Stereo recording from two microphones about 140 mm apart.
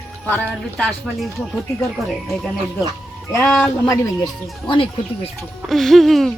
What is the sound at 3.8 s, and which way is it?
Speech, 20° left (ahead or behind).